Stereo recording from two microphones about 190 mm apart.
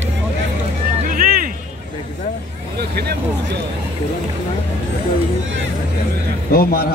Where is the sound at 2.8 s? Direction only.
55° right (ahead or behind).